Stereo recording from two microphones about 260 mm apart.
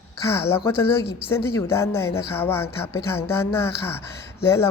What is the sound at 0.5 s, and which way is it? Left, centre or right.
A woman's voice, centre.